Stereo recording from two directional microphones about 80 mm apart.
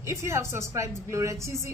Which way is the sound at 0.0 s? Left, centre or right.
Right.